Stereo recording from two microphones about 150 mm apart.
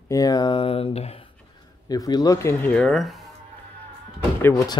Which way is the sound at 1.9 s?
25° left (ahead or behind).